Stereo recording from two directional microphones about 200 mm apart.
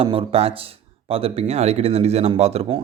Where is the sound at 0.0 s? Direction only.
25° right (ahead or behind).